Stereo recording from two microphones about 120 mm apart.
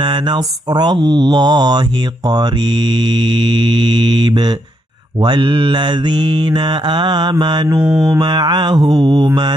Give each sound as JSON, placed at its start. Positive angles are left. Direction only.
{"t": 0.0, "sound": "mantra", "side_deg": -40}
{"t": 7.8, "sound": "mantra", "side_deg": -5}
{"t": 8.1, "sound": "mantra", "side_deg": -35}